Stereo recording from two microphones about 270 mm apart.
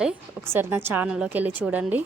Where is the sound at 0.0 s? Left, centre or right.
Centre.